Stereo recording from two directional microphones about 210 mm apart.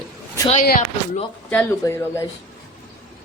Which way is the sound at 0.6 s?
45° left (ahead or behind).